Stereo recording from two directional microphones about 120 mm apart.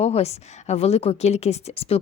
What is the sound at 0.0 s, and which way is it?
A woman's voice, 60° left (ahead or behind).